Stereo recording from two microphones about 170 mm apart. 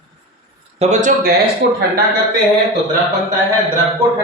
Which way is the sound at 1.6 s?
90° right.